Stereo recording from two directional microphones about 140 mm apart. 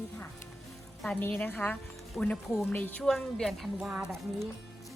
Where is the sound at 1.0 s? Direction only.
10° left (ahead or behind); by 4.1 s 5° right (ahead or behind).